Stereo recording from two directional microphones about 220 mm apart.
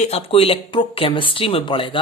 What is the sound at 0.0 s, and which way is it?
Speech, 25° left (ahead or behind).